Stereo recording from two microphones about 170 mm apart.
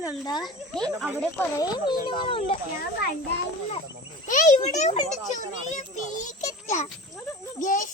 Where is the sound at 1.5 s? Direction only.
25° left (ahead or behind).